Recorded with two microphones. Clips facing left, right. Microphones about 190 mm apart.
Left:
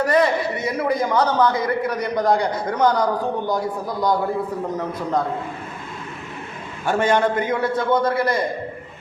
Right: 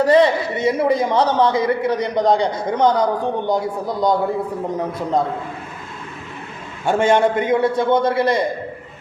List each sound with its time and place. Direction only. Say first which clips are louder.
0.0 s a man's voice: right 4 dB; 30° right (ahead or behind)
6.8 s a man's voice: right 3 dB; 25° right (ahead or behind)